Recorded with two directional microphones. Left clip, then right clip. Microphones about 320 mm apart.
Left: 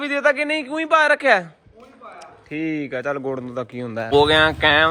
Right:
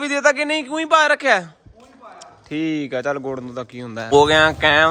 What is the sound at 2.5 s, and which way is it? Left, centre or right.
Speech, centre.